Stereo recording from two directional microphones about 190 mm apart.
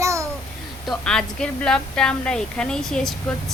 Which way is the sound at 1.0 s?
5° left (ahead or behind).